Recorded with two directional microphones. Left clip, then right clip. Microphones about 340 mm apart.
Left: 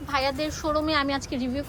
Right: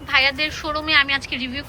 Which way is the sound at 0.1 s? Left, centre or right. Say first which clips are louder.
Right 8 dB; centre.